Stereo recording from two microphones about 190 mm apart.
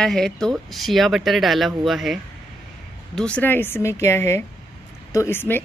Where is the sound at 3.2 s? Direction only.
5° left (ahead or behind).